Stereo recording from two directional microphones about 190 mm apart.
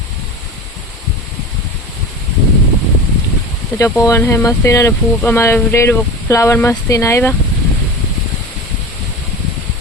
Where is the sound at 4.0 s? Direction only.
15° left (ahead or behind).